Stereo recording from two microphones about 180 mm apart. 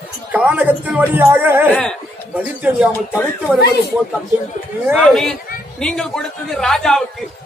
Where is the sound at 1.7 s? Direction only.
5° left (ahead or behind).